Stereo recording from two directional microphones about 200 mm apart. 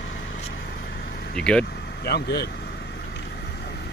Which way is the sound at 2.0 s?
55° left (ahead or behind).